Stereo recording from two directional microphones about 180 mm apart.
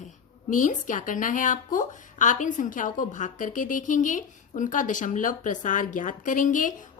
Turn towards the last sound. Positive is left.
turn(degrees=45)  # may be behind; listen again after turning